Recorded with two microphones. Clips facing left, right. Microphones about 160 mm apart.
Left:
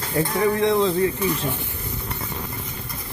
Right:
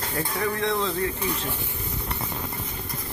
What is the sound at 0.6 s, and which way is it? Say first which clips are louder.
Speech: left 7 dB; 15° left (ahead or behind).